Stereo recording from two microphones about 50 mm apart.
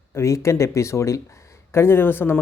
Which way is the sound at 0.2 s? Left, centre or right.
Left.